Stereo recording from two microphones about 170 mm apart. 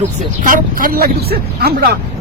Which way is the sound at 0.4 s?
55° right (ahead or behind).